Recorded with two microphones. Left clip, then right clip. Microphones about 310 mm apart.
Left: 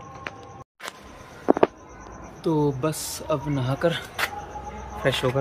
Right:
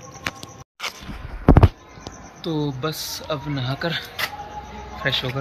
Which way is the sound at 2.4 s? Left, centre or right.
Centre.